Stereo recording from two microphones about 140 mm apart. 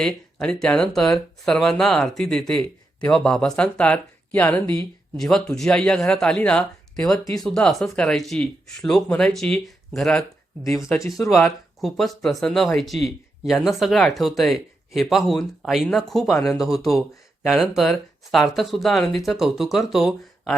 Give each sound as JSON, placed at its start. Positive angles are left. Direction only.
{"t": 0.0, "sound": "speech", "side_deg": 5}
{"t": 10.8, "sound": "speech", "side_deg": 20}
{"t": 11.2, "sound": "speech", "side_deg": 5}